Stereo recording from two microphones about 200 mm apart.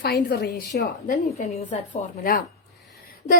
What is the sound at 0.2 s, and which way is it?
Speech, 55° left (ahead or behind).